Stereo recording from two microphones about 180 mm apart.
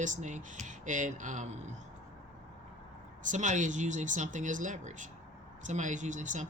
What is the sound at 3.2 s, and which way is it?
Speech, 45° right (ahead or behind).